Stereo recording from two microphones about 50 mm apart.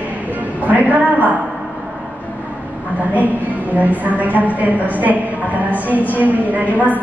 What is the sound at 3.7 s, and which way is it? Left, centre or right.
A woman's voice, right.